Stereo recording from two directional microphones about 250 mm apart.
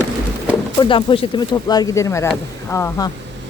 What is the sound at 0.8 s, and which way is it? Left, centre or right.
Speech, centre.